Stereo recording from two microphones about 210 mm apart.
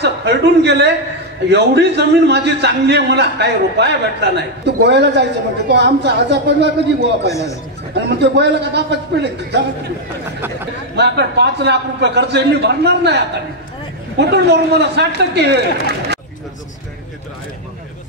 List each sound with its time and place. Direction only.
0.0 s a man's voice: 55° right (ahead or behind)
11.0 s a man's voice: 55° right (ahead or behind)